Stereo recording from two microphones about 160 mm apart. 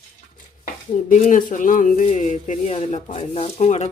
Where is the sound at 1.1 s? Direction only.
50° left (ahead or behind).